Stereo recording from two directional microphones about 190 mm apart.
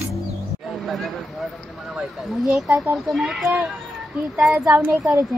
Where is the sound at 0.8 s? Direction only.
Centre (ahead or behind).